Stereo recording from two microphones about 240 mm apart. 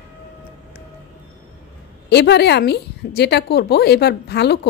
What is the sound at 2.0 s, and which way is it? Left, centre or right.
A woman's voice, left.